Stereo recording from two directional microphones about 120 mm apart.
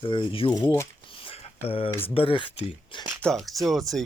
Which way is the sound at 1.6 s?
50° left (ahead or behind).